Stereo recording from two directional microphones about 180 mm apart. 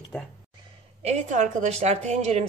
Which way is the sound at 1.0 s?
40° right (ahead or behind).